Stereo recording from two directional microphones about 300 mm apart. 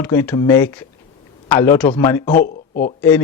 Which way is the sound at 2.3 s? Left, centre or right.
Left.